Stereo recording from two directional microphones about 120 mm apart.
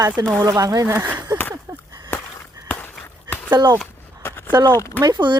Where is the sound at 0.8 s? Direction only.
20° right (ahead or behind).